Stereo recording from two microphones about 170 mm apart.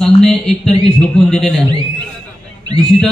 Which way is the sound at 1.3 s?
Centre (ahead or behind).